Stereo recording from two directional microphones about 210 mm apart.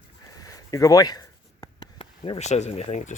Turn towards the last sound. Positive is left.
turn(degrees=35)  # may be behind; listen again after turning